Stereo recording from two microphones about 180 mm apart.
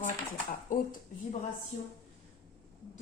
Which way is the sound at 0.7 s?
45° left (ahead or behind).